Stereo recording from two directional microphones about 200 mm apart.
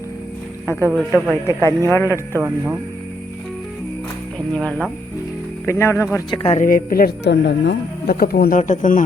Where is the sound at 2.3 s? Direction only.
10° right (ahead or behind).